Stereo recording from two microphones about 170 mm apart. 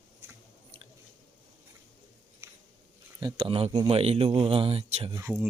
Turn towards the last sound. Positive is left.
turn(degrees=-20)  # may be behind; listen again after turning